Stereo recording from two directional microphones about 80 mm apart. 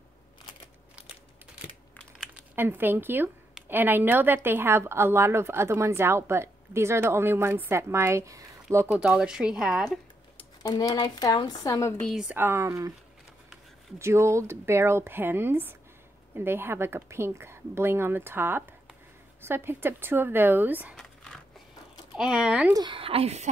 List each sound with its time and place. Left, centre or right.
2.5 s a woman's voice: right
8.9 s speech: centre
10.6 s speech: left
12.4 s a woman's voice: right
13.9 s a woman's voice: right
20.9 s zipper: centre
22.1 s speech: centre